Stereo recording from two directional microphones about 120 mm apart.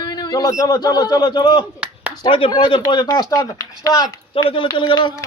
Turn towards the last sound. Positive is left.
turn(degrees=40)  # may be behind; listen again after turning